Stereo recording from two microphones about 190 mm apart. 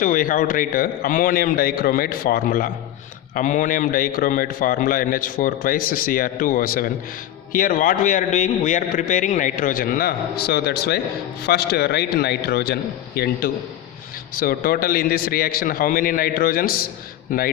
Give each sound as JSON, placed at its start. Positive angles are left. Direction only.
{"t": 0.0, "sound": "a man's voice", "side_deg": 45}